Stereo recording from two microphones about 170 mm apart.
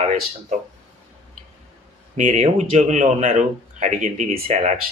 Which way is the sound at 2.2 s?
50° right (ahead or behind).